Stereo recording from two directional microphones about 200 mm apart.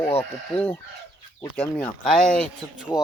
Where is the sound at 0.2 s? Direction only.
10° left (ahead or behind).